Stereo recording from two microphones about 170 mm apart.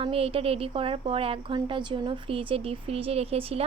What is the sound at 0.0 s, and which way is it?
Speech, 35° right (ahead or behind).